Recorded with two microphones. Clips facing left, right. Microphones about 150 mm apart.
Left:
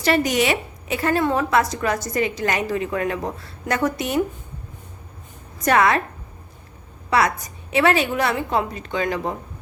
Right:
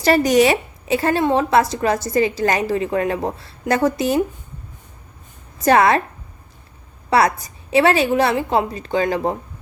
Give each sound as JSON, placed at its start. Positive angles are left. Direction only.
{"t": 0.0, "sound": "a woman's voice", "side_deg": -40}
{"t": 5.6, "sound": "a woman's voice", "side_deg": -30}
{"t": 7.1, "sound": "a woman's voice", "side_deg": -35}